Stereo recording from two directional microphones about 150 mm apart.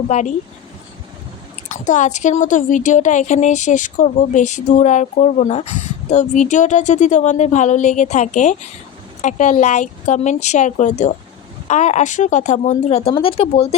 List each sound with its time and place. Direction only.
0.1 s a woman's voice: 55° left (ahead or behind)
1.7 s a woman's voice: 55° left (ahead or behind); by 13.7 s 40° left (ahead or behind)